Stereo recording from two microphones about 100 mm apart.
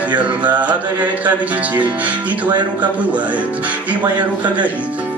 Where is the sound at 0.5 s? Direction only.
15° right (ahead or behind).